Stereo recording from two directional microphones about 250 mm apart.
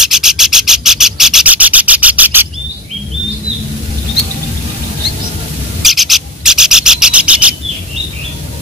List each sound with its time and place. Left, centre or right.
0.0 s rub: centre
5.8 s rub: centre